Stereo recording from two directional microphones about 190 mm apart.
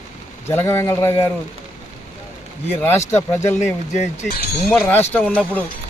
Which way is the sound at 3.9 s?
50° left (ahead or behind).